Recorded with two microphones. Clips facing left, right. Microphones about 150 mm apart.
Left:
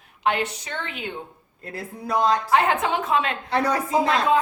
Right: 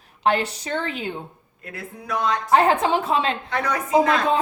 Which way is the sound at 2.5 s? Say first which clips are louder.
Right 3 dB; 35° right (ahead or behind).